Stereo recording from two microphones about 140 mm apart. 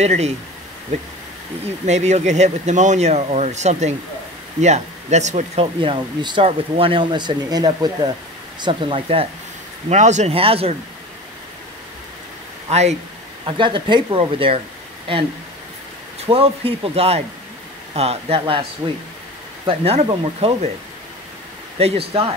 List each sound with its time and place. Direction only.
0.0 s speech: 50° right (ahead or behind)
1.9 s speech: 55° right (ahead or behind)
5.8 s speech: 35° right (ahead or behind)
9.8 s speech: 55° right (ahead or behind)
12.6 s speech: 50° right (ahead or behind)
13.5 s speech: 35° right (ahead or behind)
18.8 s speech: 30° right (ahead or behind)
19.6 s speech: 45° right (ahead or behind)
21.7 s speech: 45° right (ahead or behind)